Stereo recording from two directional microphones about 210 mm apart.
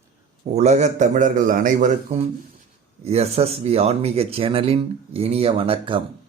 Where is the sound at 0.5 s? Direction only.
35° right (ahead or behind).